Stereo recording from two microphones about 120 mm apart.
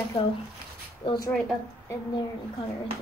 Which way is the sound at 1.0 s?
40° left (ahead or behind).